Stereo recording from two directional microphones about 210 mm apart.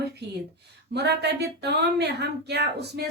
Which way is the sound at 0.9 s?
50° right (ahead or behind).